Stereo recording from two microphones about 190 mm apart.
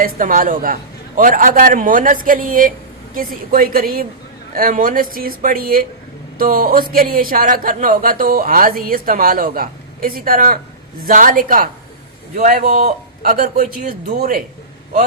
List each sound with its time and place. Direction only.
0.0 s a man's voice: 45° right (ahead or behind)
13.3 s speech: 50° right (ahead or behind)